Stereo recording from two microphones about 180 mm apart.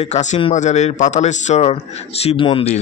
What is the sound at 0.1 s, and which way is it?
Speech, 40° left (ahead or behind).